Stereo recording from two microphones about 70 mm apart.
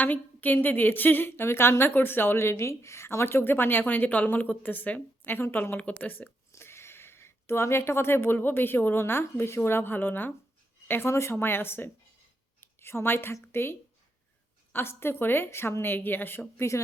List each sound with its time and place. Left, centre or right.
0.0 s a woman's voice: left
6.5 s a woman's voice: left
16.6 s speech: left